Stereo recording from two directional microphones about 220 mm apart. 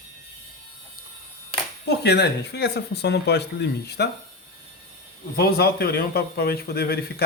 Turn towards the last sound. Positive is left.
turn(degrees=45)  # may be behind; listen again after turning